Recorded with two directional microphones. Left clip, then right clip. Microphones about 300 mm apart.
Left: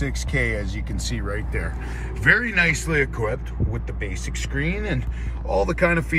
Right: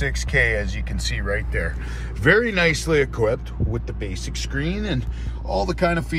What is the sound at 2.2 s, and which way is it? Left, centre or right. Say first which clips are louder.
Speech: right 1 dB; centre.